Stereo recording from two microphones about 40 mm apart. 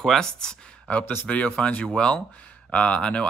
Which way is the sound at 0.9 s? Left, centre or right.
Left.